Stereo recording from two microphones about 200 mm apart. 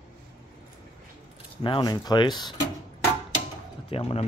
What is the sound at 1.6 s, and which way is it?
Speech, 25° left (ahead or behind).